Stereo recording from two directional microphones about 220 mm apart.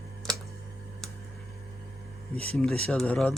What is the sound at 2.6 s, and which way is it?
Speech, 5° left (ahead or behind).